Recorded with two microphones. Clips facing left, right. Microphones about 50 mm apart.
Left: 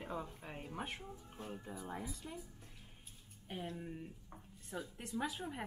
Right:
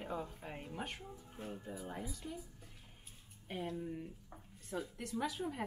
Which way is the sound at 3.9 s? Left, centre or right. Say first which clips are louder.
Right 3 dB; centre.